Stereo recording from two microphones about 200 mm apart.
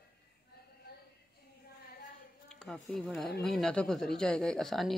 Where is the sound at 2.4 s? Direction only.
5° left (ahead or behind).